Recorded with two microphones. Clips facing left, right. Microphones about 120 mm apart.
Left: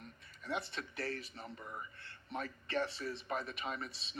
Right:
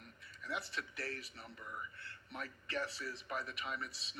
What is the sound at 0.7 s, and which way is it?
A man's voice, 35° left (ahead or behind).